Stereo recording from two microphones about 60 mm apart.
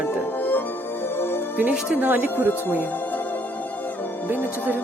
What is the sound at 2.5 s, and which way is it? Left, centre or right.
Speech, left.